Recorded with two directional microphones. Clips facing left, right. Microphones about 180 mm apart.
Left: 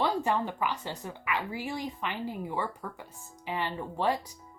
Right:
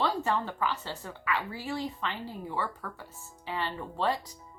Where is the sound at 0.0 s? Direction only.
15° left (ahead or behind).